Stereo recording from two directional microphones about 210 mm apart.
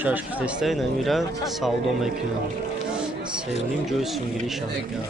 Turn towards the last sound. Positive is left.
turn(degrees=0)  # may be behind; listen again after turning